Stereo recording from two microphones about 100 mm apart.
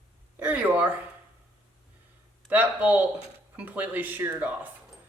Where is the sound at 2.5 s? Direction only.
15° right (ahead or behind).